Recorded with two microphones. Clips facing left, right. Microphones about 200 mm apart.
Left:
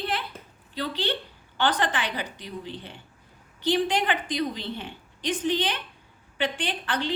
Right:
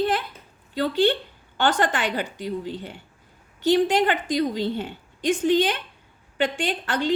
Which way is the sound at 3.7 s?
45° right (ahead or behind).